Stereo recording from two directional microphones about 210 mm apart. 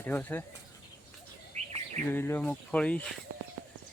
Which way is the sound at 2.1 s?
10° left (ahead or behind).